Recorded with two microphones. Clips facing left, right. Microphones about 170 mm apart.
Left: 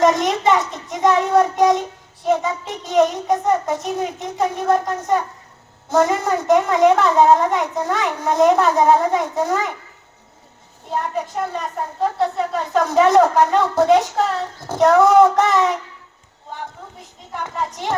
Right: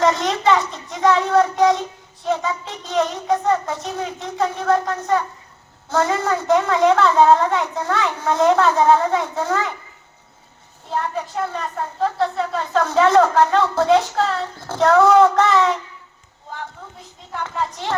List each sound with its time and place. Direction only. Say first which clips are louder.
0.0 s speech: left 2 dB; 20° left (ahead or behind)
11.5 s speech: left 1 dB; 15° left (ahead or behind)
17.4 s speech: even; 20° left (ahead or behind)